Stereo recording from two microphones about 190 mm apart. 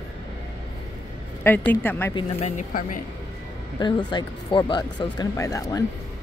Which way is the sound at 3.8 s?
25° left (ahead or behind).